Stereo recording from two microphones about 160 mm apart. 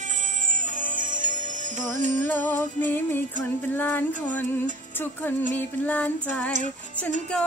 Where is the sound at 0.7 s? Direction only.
55° right (ahead or behind).